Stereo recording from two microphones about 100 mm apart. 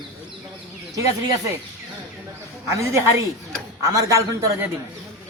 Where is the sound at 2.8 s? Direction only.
25° right (ahead or behind).